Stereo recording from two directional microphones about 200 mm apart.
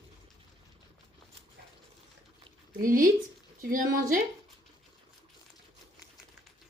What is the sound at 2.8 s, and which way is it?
Speech, 45° right (ahead or behind).